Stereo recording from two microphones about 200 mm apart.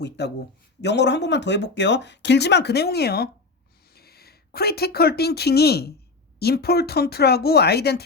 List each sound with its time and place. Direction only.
0.2 s speech: 60° left (ahead or behind)